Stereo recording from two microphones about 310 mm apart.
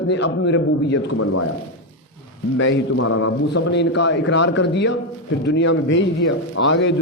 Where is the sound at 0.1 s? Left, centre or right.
Left.